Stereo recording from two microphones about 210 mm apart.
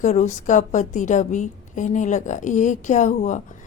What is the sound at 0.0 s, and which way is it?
A woman's voice, 35° left (ahead or behind).